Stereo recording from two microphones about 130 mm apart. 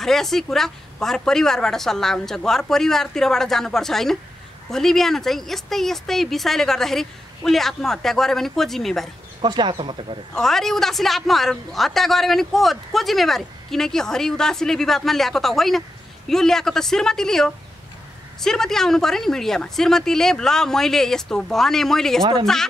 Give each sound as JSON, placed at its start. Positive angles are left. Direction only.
{"t": 0.0, "sound": "a woman's voice", "side_deg": 0}
{"t": 9.4, "sound": "speech", "side_deg": -35}
{"t": 10.3, "sound": "a woman's voice", "side_deg": 5}